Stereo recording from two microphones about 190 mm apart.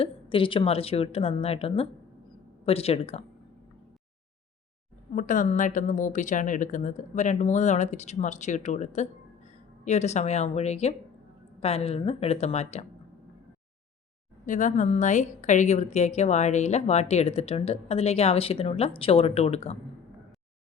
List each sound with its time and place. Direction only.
0.0 s a woman's voice: 25° left (ahead or behind)
5.1 s a woman's voice: 45° left (ahead or behind)
14.4 s a woman's voice: 40° left (ahead or behind)